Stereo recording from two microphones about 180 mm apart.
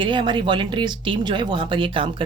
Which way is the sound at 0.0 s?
25° right (ahead or behind).